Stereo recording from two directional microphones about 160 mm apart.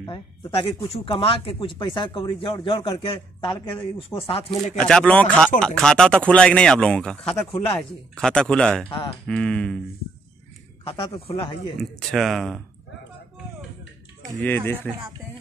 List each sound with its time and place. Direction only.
0.0 s speech: 30° left (ahead or behind)
4.7 s speech: 5° left (ahead or behind)
10.9 s speech: 35° left (ahead or behind)
12.0 s speech: centre (ahead or behind)
14.4 s speech: 10° left (ahead or behind)